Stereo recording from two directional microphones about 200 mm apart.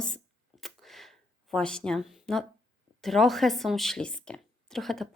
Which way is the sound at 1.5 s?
5° left (ahead or behind).